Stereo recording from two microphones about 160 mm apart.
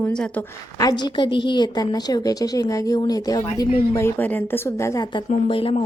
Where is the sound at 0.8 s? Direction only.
30° left (ahead or behind).